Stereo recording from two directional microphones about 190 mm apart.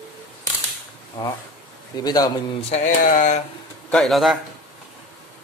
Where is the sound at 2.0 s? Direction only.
20° left (ahead or behind).